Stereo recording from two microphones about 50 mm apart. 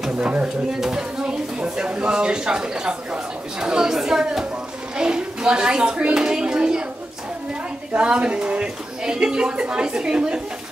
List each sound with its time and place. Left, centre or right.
0.7 s a woman's voice: centre
7.9 s speech: right